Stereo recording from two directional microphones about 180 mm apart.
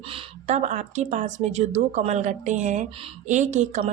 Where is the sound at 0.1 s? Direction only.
40° right (ahead or behind).